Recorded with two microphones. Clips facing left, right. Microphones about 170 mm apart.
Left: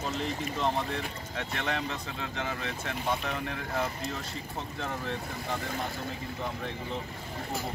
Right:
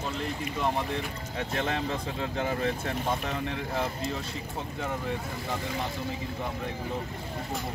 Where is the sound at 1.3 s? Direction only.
30° right (ahead or behind).